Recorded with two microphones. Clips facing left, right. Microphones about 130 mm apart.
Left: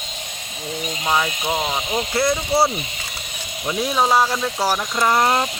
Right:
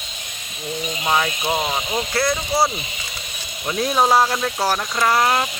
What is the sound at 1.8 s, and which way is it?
Speech, 20° left (ahead or behind).